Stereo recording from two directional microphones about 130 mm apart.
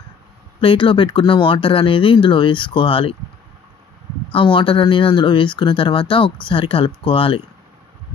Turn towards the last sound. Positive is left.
turn(degrees=45)  # may be behind; listen again after turning